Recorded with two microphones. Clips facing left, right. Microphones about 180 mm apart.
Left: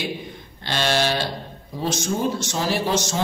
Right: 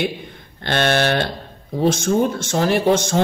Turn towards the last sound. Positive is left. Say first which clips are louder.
# right 6 dB
turn(degrees=-55)  # may be behind; listen again after turning